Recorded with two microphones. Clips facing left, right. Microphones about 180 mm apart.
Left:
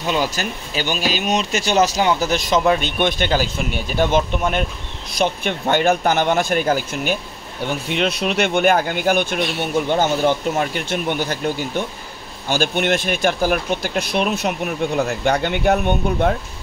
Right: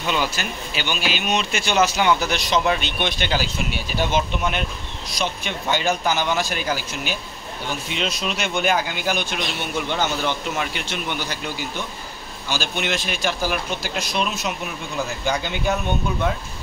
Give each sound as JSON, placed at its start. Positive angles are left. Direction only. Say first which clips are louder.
{"t": 0.0, "sound": "speech", "louder": "left 3 dB", "side_deg": 40}